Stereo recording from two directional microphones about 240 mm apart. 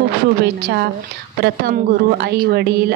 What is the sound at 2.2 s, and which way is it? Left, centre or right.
Speech, right.